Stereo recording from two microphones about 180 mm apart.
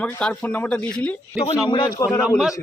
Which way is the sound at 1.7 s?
25° left (ahead or behind).